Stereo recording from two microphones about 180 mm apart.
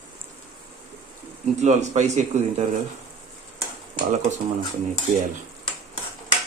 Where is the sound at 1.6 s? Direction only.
40° right (ahead or behind).